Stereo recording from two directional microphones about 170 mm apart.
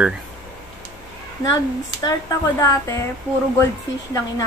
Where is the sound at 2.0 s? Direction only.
20° left (ahead or behind).